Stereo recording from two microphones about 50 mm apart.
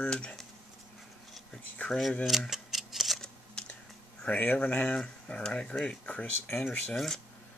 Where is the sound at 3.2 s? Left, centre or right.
Centre.